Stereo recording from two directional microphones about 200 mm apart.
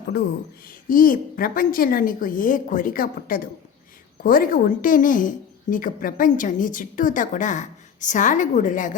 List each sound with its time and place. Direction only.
0.7 s a woman's voice: 45° left (ahead or behind)